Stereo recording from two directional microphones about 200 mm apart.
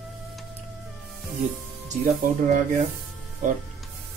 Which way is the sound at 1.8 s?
40° right (ahead or behind).